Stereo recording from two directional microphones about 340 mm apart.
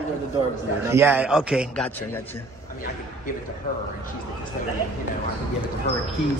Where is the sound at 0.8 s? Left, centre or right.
Centre.